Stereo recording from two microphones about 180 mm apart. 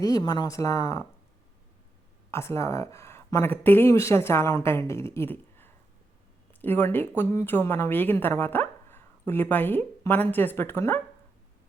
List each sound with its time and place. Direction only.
0.0 s a woman's voice: 20° left (ahead or behind)
2.3 s a woman's voice: 15° left (ahead or behind)